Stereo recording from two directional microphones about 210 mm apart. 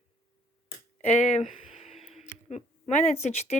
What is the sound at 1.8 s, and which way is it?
Music, 30° left (ahead or behind).